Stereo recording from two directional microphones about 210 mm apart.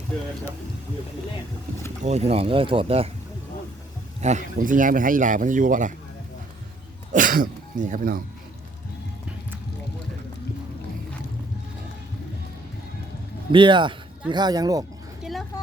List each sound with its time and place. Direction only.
2.0 s speech: 30° right (ahead or behind)
4.2 s speech: 35° right (ahead or behind)
7.1 s speech: 40° right (ahead or behind)
13.5 s speech: 25° right (ahead or behind)
15.2 s a sound: centre (ahead or behind)